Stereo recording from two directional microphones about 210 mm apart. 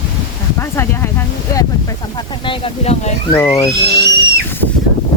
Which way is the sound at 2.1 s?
25° left (ahead or behind).